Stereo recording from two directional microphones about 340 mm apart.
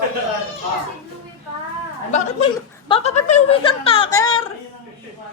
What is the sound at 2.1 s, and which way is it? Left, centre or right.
Speech, centre.